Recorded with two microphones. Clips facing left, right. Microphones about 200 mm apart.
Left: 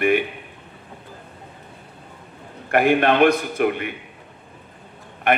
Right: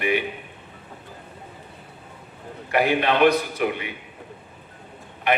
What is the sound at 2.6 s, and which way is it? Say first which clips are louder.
A man's voice: left 4 dB; 50° left (ahead or behind).